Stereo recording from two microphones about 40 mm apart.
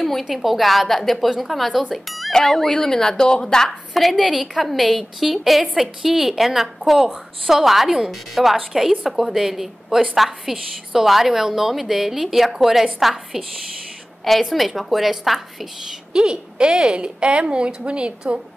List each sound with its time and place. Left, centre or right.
0.2 s a woman's voice: centre
3.9 s a woman's voice: centre
16.1 s a woman's voice: centre